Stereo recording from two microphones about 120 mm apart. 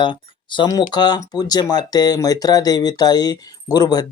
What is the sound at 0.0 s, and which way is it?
Speech, 40° left (ahead or behind).